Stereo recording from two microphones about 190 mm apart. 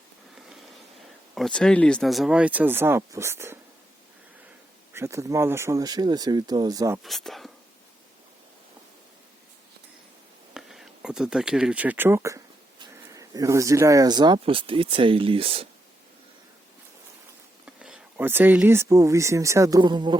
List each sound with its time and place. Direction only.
1.4 s speech: 5° left (ahead or behind); by 3.6 s 15° right (ahead or behind)
4.9 s speech: 15° right (ahead or behind)
7.0 s speech: centre (ahead or behind)
10.5 s speech: 5° right (ahead or behind); by 15.6 s 30° right (ahead or behind)
17.7 s speech: 5° right (ahead or behind); by 20.1 s 25° right (ahead or behind)